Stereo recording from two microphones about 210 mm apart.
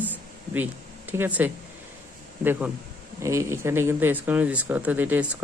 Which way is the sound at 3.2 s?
15° right (ahead or behind).